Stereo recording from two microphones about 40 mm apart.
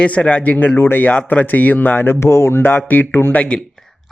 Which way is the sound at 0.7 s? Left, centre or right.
Left.